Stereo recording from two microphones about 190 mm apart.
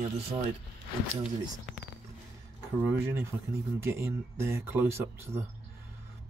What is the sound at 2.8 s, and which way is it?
Speech, 15° right (ahead or behind).